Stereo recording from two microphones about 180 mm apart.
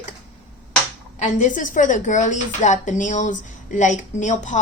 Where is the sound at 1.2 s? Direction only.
45° left (ahead or behind).